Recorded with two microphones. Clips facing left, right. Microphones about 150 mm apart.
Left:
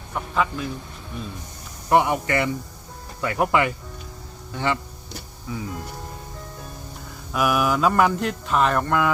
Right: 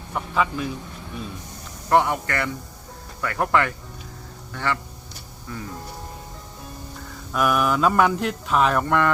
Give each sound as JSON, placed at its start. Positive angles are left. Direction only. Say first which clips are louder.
{"t": 0.1, "sound": "speech", "louder": "even", "side_deg": 0}
{"t": 1.9, "sound": "speech", "louder": "left 1 dB", "side_deg": 15}
{"t": 5.5, "sound": "speech", "louder": "left 3 dB", "side_deg": 5}
{"t": 7.3, "sound": "speech", "louder": "even", "side_deg": 5}